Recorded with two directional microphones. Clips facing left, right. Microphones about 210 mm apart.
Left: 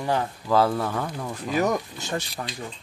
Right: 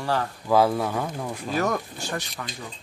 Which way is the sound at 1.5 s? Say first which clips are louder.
Left 2 dB; 15° left (ahead or behind).